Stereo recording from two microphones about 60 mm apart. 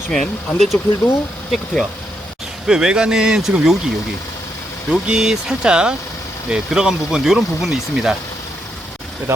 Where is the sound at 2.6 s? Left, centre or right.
Centre.